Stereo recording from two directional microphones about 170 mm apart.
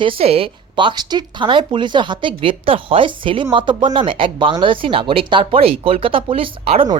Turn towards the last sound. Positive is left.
turn(degrees=-35)  # may be behind; listen again after turning